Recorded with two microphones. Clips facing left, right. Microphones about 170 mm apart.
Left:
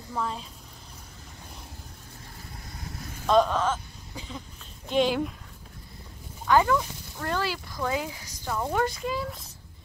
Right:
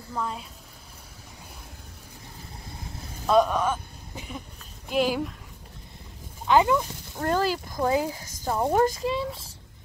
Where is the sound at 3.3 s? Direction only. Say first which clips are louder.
Right 1 dB; 10° right (ahead or behind).